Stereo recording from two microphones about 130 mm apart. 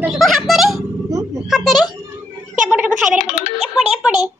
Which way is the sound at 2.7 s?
10° right (ahead or behind).